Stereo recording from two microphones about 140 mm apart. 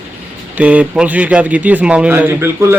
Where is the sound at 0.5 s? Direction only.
10° right (ahead or behind).